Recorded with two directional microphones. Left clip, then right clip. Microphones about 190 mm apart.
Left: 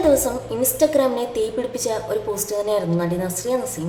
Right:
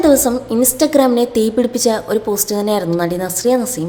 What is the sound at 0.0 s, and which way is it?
A woman's voice, 40° right (ahead or behind).